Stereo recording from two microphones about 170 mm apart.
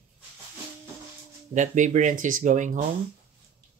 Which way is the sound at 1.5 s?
45° right (ahead or behind).